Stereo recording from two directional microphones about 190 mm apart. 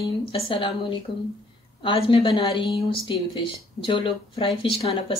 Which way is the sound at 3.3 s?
25° left (ahead or behind).